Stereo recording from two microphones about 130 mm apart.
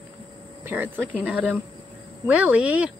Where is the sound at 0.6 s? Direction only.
15° right (ahead or behind).